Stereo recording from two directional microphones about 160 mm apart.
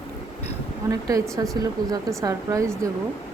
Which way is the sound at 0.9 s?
20° right (ahead or behind).